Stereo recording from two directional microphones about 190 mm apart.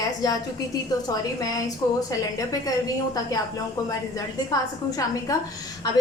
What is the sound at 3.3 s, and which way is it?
A woman's voice, 20° left (ahead or behind).